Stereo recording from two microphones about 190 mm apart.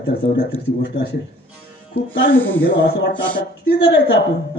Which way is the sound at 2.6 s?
65° left (ahead or behind).